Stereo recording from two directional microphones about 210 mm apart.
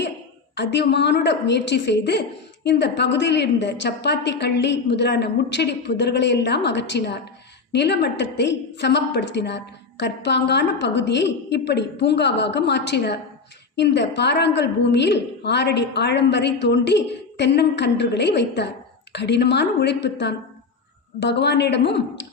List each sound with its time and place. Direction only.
0.5 s a woman's voice: 55° left (ahead or behind)